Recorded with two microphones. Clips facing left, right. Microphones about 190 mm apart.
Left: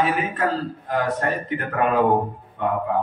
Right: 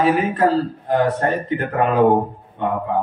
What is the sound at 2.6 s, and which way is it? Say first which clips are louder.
Speech: right 1 dB; 25° right (ahead or behind).